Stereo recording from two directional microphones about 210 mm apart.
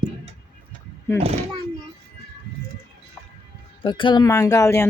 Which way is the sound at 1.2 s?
30° right (ahead or behind).